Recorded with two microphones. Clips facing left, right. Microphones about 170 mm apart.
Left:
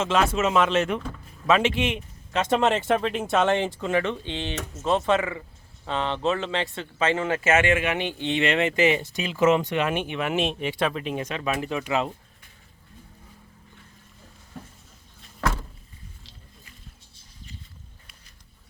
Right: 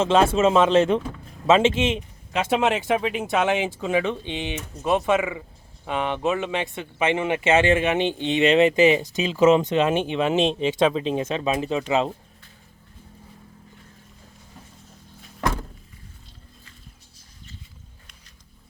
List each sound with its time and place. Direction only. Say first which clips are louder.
0.0 s speech: right 5 dB; 30° right (ahead or behind)
2.4 s speech: even; 5° right (ahead or behind)
7.5 s speech: right 4 dB; 30° right (ahead or behind)